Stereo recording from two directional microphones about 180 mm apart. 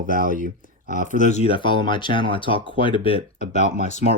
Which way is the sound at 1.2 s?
35° left (ahead or behind).